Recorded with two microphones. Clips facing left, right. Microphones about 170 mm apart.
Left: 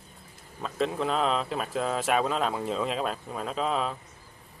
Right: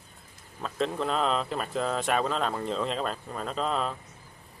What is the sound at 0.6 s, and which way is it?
Speech, centre (ahead or behind).